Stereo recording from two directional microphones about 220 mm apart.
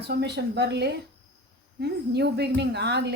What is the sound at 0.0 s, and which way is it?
A woman's voice, 50° right (ahead or behind).